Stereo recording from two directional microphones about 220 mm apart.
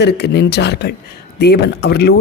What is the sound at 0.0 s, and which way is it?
Speech, 50° left (ahead or behind).